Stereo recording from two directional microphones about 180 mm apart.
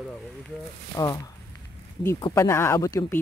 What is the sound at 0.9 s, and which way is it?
Speech, 20° left (ahead or behind).